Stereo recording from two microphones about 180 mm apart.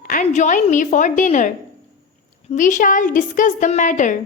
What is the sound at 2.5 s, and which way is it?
A woman's voice, 45° left (ahead or behind).